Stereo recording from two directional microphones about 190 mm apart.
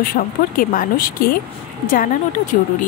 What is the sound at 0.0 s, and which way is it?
Speech, 50° left (ahead or behind).